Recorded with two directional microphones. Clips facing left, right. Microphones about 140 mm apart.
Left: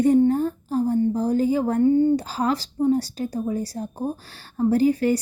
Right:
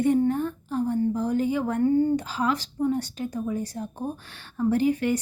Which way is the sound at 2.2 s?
35° left (ahead or behind).